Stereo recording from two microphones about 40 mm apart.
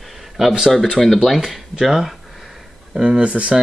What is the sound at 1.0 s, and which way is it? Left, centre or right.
Speech, centre.